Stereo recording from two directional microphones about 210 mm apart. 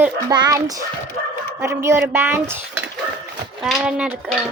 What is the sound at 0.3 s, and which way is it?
Speech, 20° right (ahead or behind).